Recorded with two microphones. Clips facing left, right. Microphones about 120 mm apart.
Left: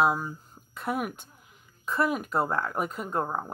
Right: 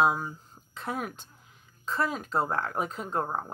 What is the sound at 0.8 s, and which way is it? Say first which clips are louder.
Speech: left 3 dB; 10° left (ahead or behind).